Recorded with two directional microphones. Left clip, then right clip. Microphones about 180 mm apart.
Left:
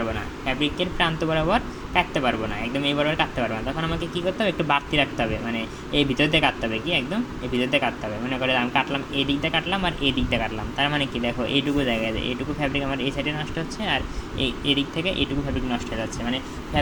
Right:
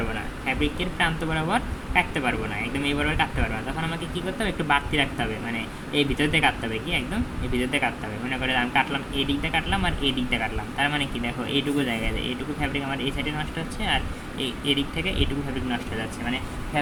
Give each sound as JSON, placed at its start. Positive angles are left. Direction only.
{"t": 0.6, "sound": "speech", "side_deg": 25}